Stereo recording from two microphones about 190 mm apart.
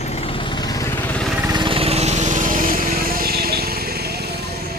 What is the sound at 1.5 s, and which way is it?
Vehicle, 25° right (ahead or behind).